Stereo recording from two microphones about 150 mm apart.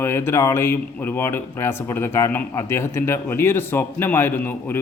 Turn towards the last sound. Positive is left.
turn(degrees=15)  # may be behind; listen again after turning